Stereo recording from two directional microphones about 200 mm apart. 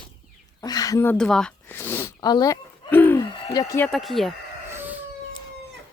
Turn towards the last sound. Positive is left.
turn(degrees=-10)  # may be behind; listen again after turning